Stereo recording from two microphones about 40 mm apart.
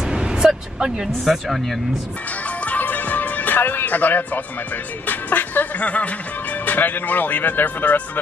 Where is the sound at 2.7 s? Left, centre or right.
Left.